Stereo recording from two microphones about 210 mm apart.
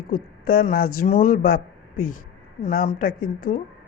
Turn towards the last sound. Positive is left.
turn(degrees=40)  # may be behind; listen again after turning